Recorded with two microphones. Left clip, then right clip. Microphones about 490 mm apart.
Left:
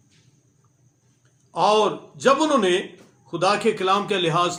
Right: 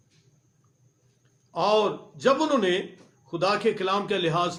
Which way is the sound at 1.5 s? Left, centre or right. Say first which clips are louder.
Left 4 dB; right.